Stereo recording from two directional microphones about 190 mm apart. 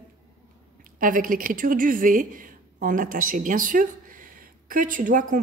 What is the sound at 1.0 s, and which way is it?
A woman's voice, 45° right (ahead or behind).